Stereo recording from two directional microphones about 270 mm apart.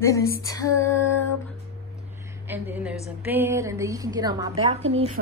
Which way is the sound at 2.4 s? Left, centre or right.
Centre.